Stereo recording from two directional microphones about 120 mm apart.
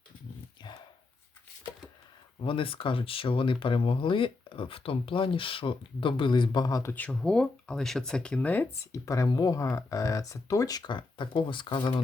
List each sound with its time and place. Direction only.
0.6 s dog: 40° left (ahead or behind)
2.4 s speech: 45° left (ahead or behind)
6.9 s speech: 10° left (ahead or behind)
8.9 s speech: 25° left (ahead or behind); by 12.0 s 45° left (ahead or behind)